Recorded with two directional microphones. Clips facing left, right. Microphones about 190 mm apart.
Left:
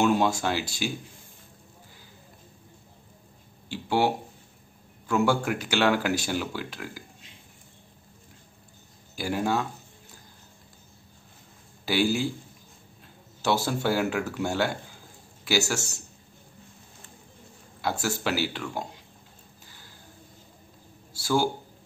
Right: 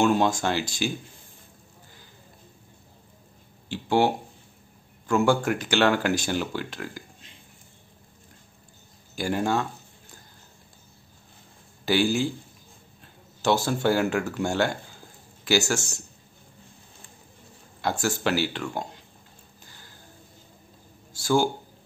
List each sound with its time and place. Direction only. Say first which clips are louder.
0.0 s speech: right 1 dB; 5° left (ahead or behind)
3.6 s speech: right 2 dB; 5° left (ahead or behind)
9.1 s speech: right 2 dB; 5° left (ahead or behind)
11.8 s speech: right 2 dB; 5° left (ahead or behind)
13.4 s speech: right 3 dB; 5° left (ahead or behind)
18.0 s speech: right 4 dB; 5° left (ahead or behind)